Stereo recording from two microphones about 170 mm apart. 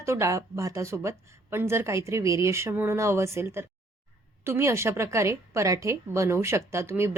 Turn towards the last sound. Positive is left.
turn(degrees=-15)  # may be behind; listen again after turning